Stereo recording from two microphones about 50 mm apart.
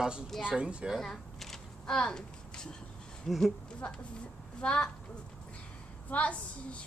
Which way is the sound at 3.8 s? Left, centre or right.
Left.